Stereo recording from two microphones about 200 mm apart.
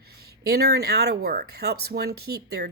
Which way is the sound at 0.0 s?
50° right (ahead or behind).